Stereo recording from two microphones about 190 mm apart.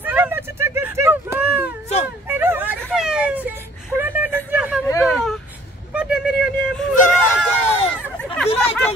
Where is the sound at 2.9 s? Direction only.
5° right (ahead or behind).